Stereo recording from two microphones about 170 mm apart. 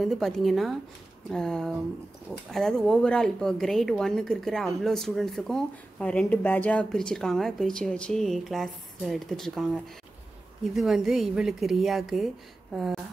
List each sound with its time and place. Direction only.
0.0 s a woman's voice: centre (ahead or behind)
10.7 s a woman's voice: centre (ahead or behind)